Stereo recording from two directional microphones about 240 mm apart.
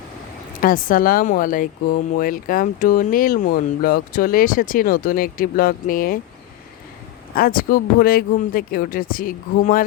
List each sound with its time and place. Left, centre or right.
0.6 s speech: left
7.3 s speech: left